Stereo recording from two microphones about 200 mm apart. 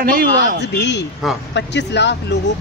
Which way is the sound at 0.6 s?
60° left (ahead or behind).